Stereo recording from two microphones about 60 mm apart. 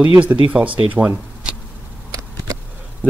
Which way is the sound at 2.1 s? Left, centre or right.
Right.